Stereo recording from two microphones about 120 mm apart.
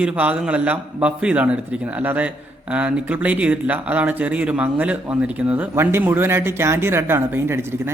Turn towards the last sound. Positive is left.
turn(degrees=-20)  # may be behind; listen again after turning